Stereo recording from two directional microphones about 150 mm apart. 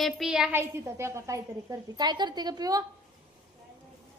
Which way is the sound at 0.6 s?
15° right (ahead or behind).